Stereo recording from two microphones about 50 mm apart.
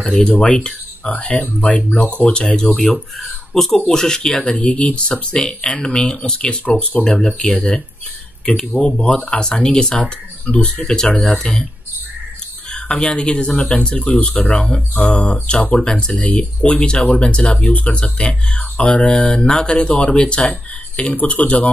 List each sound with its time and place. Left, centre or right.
0.0 s speech: centre
0.4 s speech: left
2.5 s speech: centre; by 7.1 s left
7.2 s speech: centre
9.0 s speech: left
12.7 s speech: left
13.9 s speech: left